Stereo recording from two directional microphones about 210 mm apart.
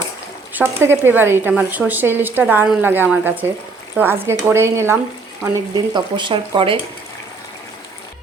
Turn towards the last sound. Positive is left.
turn(degrees=-25)  # may be behind; listen again after turning